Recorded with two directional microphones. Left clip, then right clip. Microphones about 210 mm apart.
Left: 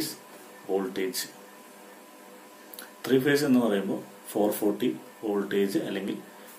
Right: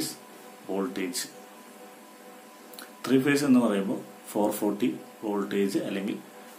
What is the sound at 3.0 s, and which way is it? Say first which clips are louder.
Speech: left 1 dB; 10° right (ahead or behind).